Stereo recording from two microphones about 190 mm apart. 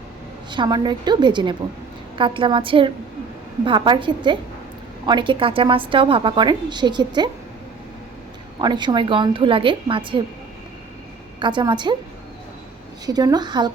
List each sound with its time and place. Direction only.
0.5 s a woman's voice: 25° right (ahead or behind)
8.6 s a woman's voice: 20° right (ahead or behind)
11.3 s a woman's voice: 25° right (ahead or behind)
13.1 s a woman's voice: 20° right (ahead or behind)